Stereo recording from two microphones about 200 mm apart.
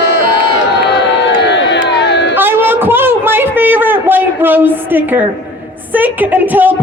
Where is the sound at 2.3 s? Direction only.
10° right (ahead or behind).